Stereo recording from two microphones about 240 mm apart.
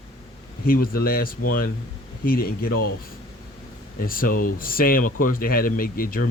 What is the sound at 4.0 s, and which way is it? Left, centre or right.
Speech, left.